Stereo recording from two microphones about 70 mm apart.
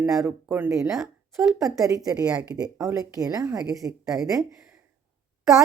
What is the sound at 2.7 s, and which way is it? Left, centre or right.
A woman's voice, right.